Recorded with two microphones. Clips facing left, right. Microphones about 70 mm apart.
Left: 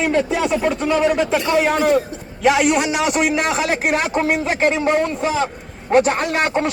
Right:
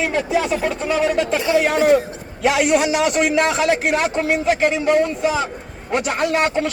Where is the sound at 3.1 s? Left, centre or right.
Centre.